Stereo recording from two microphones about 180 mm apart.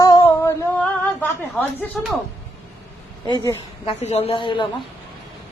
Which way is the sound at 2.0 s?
5° left (ahead or behind).